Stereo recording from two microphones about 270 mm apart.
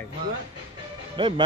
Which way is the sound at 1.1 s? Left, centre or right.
Centre.